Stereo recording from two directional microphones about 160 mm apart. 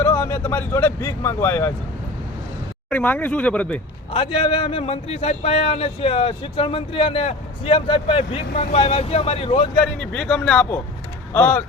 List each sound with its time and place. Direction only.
0.0 s speech: 15° left (ahead or behind)
2.9 s speech: 10° left (ahead or behind)
4.1 s a man's voice: 35° left (ahead or behind)
10.0 s speech: 5° left (ahead or behind)